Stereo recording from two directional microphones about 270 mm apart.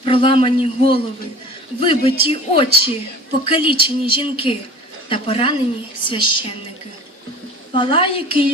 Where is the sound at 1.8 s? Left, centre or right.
Centre.